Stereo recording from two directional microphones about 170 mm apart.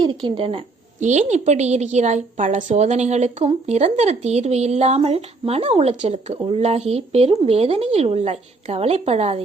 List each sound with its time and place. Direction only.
0.0 s a woman's voice: 30° right (ahead or behind)
0.9 s a woman's voice: 45° right (ahead or behind)